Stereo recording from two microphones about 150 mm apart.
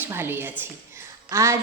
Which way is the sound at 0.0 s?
15° right (ahead or behind).